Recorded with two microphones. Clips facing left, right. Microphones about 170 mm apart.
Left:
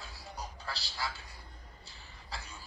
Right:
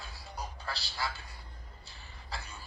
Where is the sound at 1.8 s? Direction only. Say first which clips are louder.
Right 1 dB; 60° right (ahead or behind).